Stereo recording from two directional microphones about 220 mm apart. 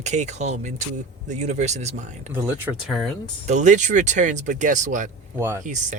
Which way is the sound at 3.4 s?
35° right (ahead or behind).